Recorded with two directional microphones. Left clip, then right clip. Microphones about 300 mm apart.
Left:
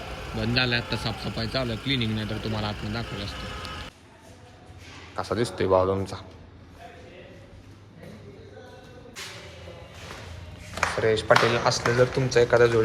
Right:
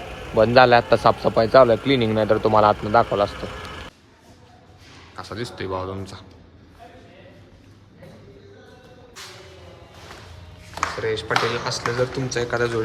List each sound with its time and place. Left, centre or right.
0.3 s a man's voice: centre
3.4 s a sound: centre
5.1 s speech: centre
11.0 s speech: centre